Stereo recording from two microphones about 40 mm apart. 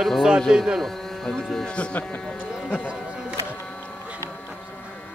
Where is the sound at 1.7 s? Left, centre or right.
Left.